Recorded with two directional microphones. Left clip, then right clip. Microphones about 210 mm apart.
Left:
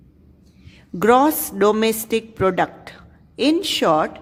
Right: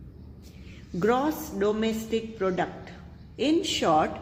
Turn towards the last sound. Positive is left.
turn(degrees=35)  # may be behind; listen again after turning